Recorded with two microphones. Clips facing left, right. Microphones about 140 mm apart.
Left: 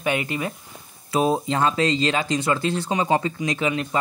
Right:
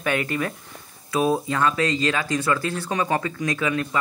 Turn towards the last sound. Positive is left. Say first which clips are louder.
# left 1 dB
turn(degrees=20)  # may be behind; listen again after turning